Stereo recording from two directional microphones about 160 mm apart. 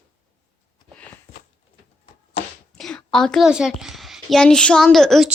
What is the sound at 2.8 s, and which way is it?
A child's voice, 5° left (ahead or behind).